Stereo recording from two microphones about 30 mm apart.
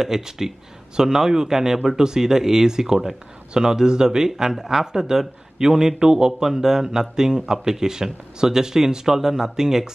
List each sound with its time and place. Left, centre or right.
0.0 s a man's voice: centre